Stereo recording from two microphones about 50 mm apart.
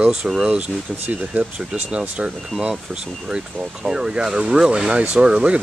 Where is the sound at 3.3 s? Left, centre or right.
Centre.